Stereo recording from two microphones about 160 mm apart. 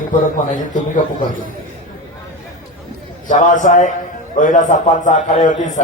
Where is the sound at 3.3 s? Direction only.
55° left (ahead or behind).